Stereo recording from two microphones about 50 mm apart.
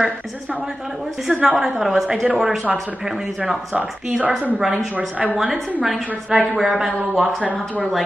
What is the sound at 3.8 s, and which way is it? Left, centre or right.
Speech, right.